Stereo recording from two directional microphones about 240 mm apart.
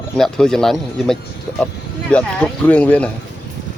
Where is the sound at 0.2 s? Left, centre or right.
Centre.